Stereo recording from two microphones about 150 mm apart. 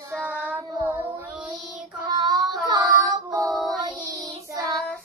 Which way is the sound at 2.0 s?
25° right (ahead or behind).